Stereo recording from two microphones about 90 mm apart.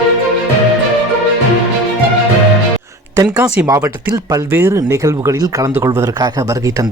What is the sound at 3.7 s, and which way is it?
Speech, 35° right (ahead or behind).